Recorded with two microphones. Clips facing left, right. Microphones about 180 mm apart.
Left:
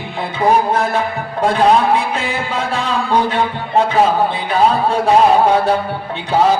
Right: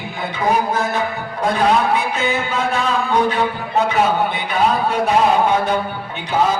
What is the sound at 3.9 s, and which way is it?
A man's voice, 30° left (ahead or behind).